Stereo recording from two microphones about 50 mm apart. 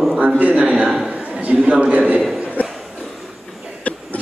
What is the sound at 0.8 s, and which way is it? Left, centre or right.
Speech, centre.